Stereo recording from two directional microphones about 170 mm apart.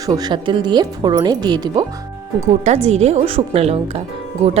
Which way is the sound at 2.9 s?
40° right (ahead or behind).